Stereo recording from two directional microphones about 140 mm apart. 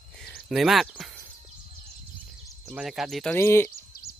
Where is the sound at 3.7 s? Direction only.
90° left.